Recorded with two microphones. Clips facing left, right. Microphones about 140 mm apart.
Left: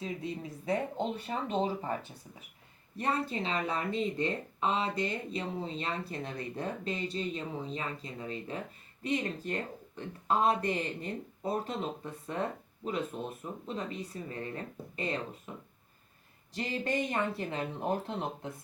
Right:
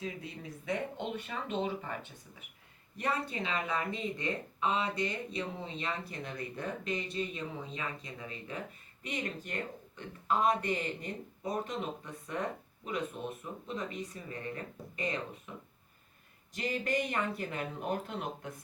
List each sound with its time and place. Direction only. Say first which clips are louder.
0.0 s speech: left 4 dB; 30° left (ahead or behind)
16.6 s speech: left 1 dB; 25° left (ahead or behind)